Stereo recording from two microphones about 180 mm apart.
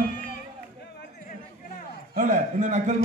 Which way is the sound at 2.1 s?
45° right (ahead or behind).